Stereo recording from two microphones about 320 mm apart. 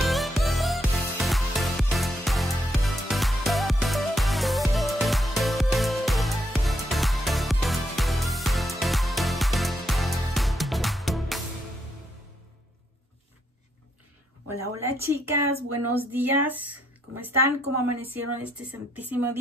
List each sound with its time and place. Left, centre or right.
0.0 s music: centre
14.5 s a sound: centre
16.1 s speech: centre
17.6 s a woman's voice: right
18.0 s speech: centre